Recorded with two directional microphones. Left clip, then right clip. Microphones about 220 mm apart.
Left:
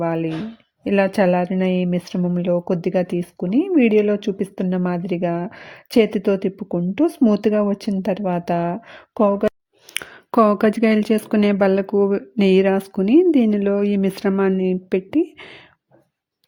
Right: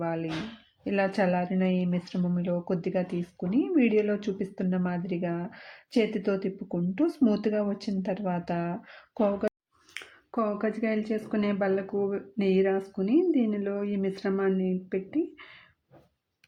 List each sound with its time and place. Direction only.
0.0 s speech: 45° left (ahead or behind)